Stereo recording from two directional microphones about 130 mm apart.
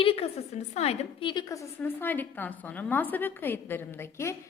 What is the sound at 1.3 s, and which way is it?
Speech, 30° left (ahead or behind).